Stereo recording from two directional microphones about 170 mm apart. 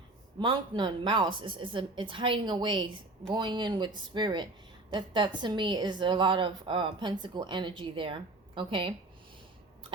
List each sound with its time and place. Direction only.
0.3 s speech: 25° right (ahead or behind)